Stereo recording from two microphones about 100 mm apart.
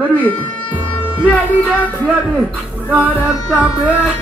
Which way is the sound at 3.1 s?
15° right (ahead or behind).